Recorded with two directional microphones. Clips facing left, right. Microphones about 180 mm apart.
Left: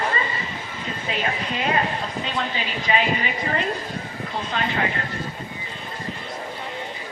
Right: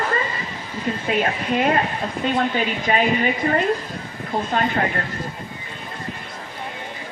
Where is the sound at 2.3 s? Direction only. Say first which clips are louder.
Right 7 dB; 50° right (ahead or behind).